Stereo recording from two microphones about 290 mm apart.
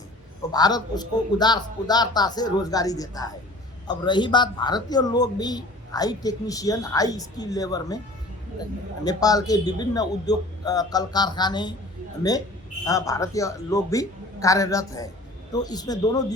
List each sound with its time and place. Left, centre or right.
0.5 s speech: centre
9.0 s speech: centre